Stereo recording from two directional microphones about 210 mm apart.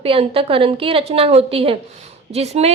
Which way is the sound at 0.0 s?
25° right (ahead or behind).